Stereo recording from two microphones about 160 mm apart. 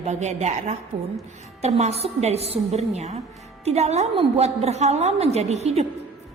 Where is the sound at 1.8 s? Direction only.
40° right (ahead or behind).